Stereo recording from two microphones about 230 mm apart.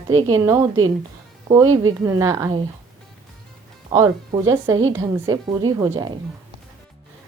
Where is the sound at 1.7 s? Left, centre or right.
Right.